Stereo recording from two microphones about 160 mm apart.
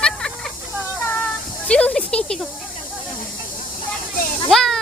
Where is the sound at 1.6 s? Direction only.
5° left (ahead or behind).